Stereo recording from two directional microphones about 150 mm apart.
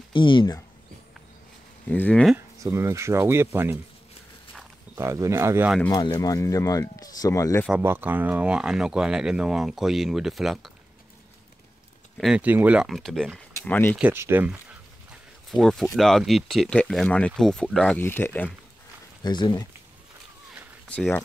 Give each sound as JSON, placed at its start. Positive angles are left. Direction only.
{"t": 0.1, "sound": "speech", "side_deg": 35}
{"t": 1.9, "sound": "speech", "side_deg": 10}
{"t": 2.3, "sound": "speech", "side_deg": -20}
{"t": 4.9, "sound": "speech", "side_deg": -20}
{"t": 5.9, "sound": "speech", "side_deg": 25}
{"t": 7.7, "sound": "speech", "side_deg": -15}
{"t": 12.2, "sound": "speech", "side_deg": -5}
{"t": 13.9, "sound": "speech", "side_deg": -15}
{"t": 15.5, "sound": "speech", "side_deg": 0}
{"t": 19.2, "sound": "speech", "side_deg": 30}
{"t": 20.9, "sound": "speech", "side_deg": 10}